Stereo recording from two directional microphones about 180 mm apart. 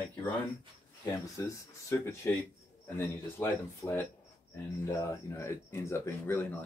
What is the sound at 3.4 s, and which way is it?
Speech, 10° left (ahead or behind).